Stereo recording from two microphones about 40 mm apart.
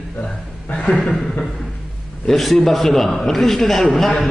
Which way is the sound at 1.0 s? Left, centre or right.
Centre.